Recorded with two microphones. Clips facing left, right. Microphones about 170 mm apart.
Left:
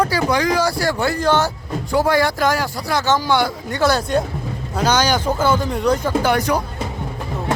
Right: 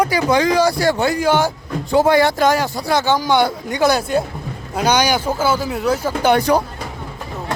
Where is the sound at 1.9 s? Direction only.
25° right (ahead or behind); by 6.1 s 5° right (ahead or behind).